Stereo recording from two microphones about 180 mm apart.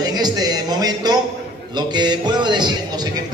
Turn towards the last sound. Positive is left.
turn(degrees=-25)  # may be behind; listen again after turning